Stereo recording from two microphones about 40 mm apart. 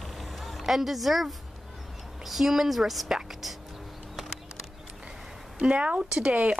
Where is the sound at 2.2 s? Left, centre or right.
Centre.